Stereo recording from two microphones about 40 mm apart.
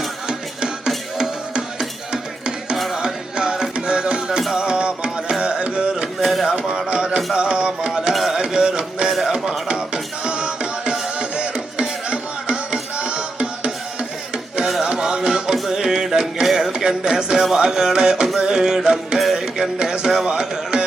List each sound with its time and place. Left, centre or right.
1.2 s music: centre
2.9 s music: centre
4.3 s music: centre
4.6 s music: right
6.1 s a sound: centre
6.7 s music: centre
6.9 s music: right
8.1 s music: centre
8.4 s music: centre
9.0 s music: centre
9.3 s music: centre
14.8 s music: centre
16.7 s a sound: centre
17.6 s music: centre